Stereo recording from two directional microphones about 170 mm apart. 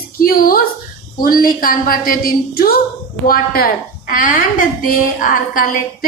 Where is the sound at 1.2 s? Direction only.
60° left (ahead or behind).